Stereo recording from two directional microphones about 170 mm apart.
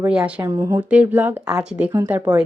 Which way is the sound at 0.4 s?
20° right (ahead or behind).